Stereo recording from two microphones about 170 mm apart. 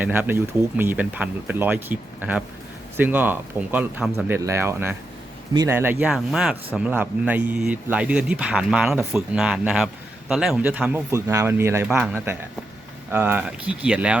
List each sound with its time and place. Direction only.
0.0 s speech: 10° right (ahead or behind)